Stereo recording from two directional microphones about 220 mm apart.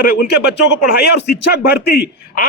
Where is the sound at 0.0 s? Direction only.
45° left (ahead or behind).